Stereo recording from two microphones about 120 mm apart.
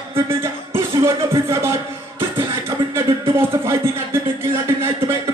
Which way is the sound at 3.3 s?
20° right (ahead or behind).